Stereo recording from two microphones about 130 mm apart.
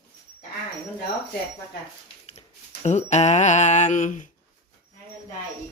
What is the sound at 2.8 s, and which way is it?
Speech, 60° left (ahead or behind).